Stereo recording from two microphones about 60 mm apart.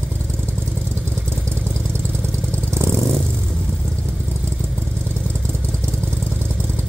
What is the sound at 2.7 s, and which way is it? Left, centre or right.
Vehicle, right.